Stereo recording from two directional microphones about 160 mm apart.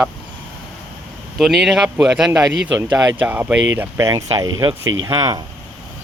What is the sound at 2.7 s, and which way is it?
Speech, 20° right (ahead or behind).